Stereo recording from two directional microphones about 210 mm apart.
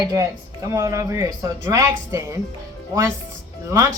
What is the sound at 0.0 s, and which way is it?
Speech, 20° right (ahead or behind).